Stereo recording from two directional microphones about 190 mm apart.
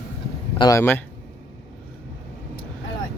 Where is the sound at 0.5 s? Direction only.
20° left (ahead or behind).